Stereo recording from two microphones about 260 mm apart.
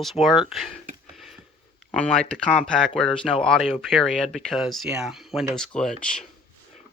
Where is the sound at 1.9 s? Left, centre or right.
Centre.